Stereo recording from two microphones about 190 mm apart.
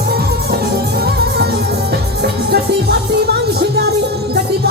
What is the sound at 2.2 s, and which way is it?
Music, 55° right (ahead or behind).